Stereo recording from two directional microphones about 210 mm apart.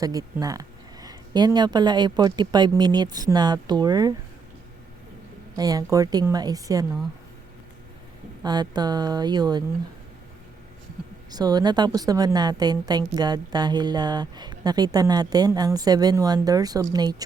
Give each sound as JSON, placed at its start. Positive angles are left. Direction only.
{"t": 0.0, "sound": "a woman's voice", "side_deg": -15}
{"t": 5.5, "sound": "a woman's voice", "side_deg": -15}
{"t": 8.4, "sound": "a woman's voice", "side_deg": -20}
{"t": 11.3, "sound": "a woman's voice", "side_deg": -20}